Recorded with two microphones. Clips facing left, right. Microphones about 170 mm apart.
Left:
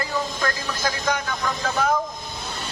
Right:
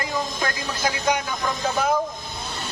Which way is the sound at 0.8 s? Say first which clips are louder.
Right 2 dB; 15° right (ahead or behind).